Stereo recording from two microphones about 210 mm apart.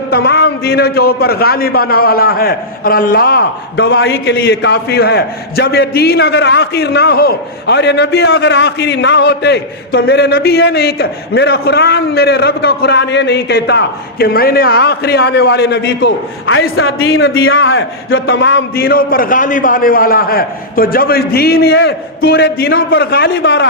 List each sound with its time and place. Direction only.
0.1 s a man's voice: 50° left (ahead or behind)